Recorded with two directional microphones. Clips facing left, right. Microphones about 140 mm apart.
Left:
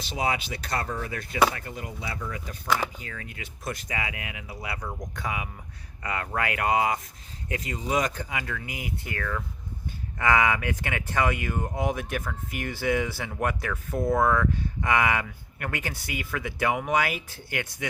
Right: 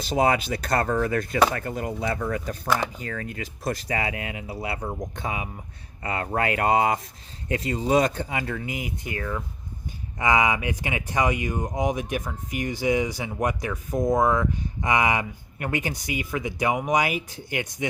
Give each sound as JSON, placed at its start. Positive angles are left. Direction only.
{"t": 0.1, "sound": "speech", "side_deg": -45}
{"t": 3.0, "sound": "speech", "side_deg": -45}